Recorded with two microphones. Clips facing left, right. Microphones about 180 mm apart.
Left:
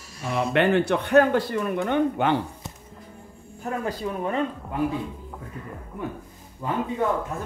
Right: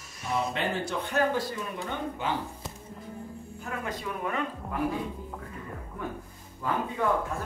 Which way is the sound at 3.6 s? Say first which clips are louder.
Left 7 dB; 35° left (ahead or behind).